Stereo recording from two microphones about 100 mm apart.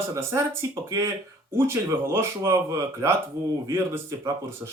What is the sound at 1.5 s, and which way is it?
Speech, 25° right (ahead or behind).